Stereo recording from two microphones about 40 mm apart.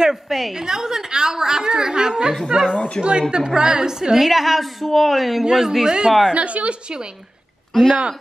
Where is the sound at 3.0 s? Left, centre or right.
Left.